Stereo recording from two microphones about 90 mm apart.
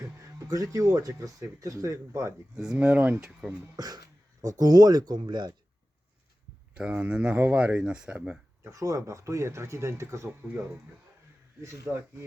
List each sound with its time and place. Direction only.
0.0 s speech: 35° right (ahead or behind)
2.6 s speech: 10° right (ahead or behind)
3.8 s speech: 45° right (ahead or behind)
6.7 s speech: 15° right (ahead or behind)
8.6 s speech: 40° right (ahead or behind)
11.6 s speech: 35° right (ahead or behind)